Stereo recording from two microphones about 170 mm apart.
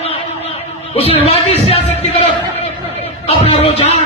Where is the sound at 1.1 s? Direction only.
35° left (ahead or behind).